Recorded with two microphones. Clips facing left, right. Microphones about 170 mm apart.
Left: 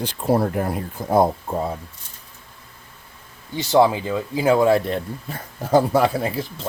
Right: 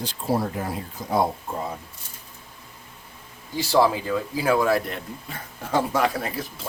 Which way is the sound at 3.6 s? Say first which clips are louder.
Left 3 dB; 20° left (ahead or behind).